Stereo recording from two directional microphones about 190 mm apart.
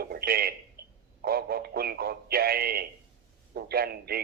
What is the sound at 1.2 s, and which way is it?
Speech, 55° right (ahead or behind).